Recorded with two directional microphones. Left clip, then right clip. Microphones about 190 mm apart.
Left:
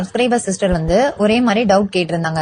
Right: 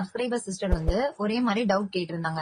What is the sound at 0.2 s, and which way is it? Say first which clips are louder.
Speech: left 14 dB; 35° left (ahead or behind).